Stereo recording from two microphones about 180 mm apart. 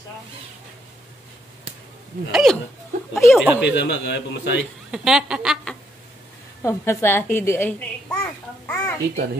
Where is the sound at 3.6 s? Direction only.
85° left.